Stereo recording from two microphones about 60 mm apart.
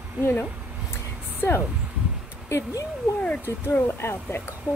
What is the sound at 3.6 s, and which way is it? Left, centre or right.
Speech, left.